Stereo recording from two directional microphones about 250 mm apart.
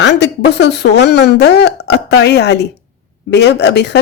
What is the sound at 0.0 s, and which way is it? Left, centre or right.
A woman's voice, left.